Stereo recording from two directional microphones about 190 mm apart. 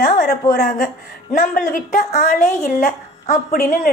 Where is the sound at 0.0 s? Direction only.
45° left (ahead or behind).